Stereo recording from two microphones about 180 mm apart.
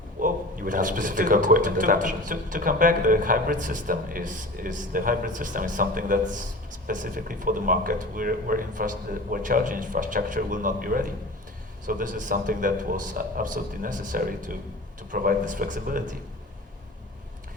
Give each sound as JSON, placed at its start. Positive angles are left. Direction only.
{"t": 0.2, "sound": "speech", "side_deg": -50}